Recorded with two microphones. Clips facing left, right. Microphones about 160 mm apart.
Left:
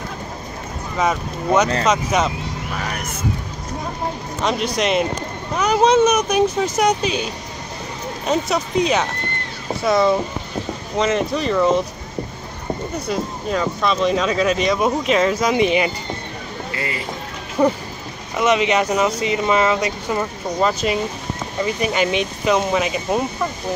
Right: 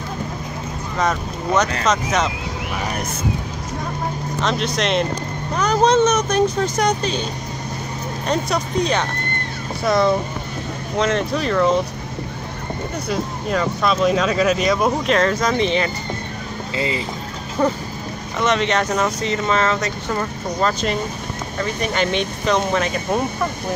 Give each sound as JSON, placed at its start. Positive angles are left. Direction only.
{"t": 0.9, "sound": "speech", "side_deg": 10}
{"t": 4.4, "sound": "speech", "side_deg": 10}
{"t": 8.3, "sound": "speech", "side_deg": 5}
{"t": 13.1, "sound": "speech", "side_deg": 0}
{"t": 16.7, "sound": "speech", "side_deg": -25}
{"t": 17.6, "sound": "speech", "side_deg": 15}